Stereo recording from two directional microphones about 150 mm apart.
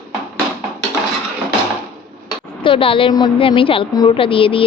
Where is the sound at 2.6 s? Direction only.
35° left (ahead or behind).